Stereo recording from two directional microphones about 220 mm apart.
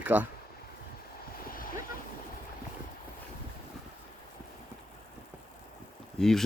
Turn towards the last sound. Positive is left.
turn(degrees=0)  # may be behind; listen again after turning